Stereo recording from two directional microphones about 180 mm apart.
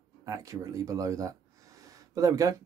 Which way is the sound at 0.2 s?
20° right (ahead or behind).